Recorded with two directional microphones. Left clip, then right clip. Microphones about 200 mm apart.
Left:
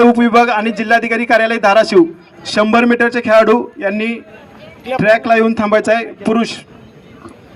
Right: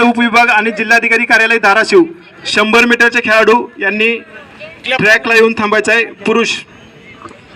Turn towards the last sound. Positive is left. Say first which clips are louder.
# right 4 dB
turn(degrees=70)  # may be behind; listen again after turning